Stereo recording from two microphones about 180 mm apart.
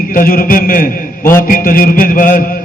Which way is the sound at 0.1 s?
55° left (ahead or behind).